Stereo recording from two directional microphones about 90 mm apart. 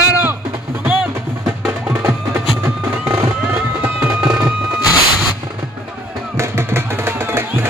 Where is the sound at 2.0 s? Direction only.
25° right (ahead or behind).